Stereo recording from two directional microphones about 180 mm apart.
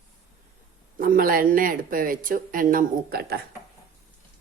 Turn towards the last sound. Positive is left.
turn(degrees=-60)  # may be behind; listen again after turning